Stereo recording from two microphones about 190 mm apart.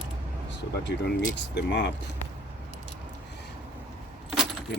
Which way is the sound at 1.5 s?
65° left (ahead or behind).